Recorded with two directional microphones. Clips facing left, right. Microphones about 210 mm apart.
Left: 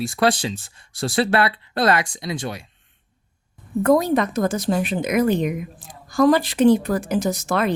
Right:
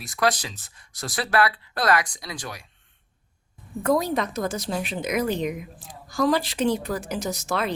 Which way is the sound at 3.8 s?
55° left (ahead or behind).